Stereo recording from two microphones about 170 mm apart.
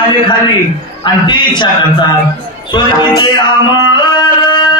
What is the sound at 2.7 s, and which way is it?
Mantra, 25° left (ahead or behind).